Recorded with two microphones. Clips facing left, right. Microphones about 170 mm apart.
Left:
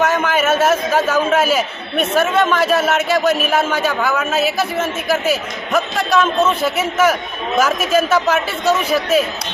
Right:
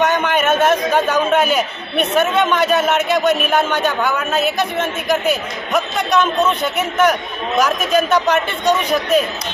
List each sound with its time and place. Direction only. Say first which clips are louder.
0.0 s a man's voice: even; 5° left (ahead or behind)